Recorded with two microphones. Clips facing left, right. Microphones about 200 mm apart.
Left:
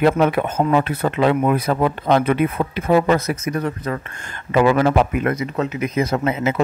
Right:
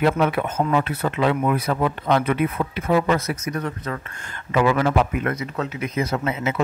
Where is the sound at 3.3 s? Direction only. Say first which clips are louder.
Left 4 dB; 25° left (ahead or behind).